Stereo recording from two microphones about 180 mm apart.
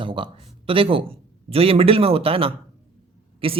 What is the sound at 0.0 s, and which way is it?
Speech, 30° right (ahead or behind).